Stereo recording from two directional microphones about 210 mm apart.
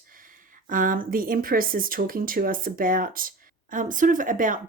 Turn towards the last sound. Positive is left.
turn(degrees=-40)  # may be behind; listen again after turning